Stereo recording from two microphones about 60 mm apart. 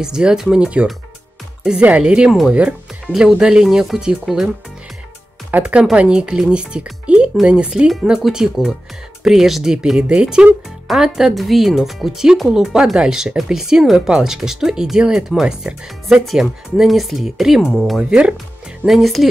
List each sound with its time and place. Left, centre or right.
0.0 s speech: centre
3.1 s speech: centre
3.6 s speech: centre
5.5 s speech: right; by 19.2 s centre